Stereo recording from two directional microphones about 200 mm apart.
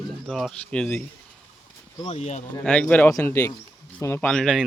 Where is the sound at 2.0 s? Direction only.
35° left (ahead or behind).